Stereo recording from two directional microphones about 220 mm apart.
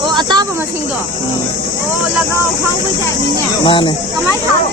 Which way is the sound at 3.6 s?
25° left (ahead or behind).